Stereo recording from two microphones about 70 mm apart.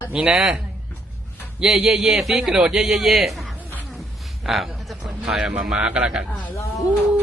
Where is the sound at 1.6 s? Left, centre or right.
Centre.